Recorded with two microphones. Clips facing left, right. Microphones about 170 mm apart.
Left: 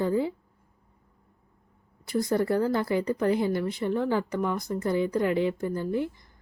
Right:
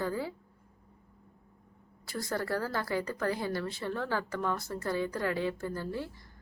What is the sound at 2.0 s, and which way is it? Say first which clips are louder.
A woman's voice: left 9 dB; 20° left (ahead or behind).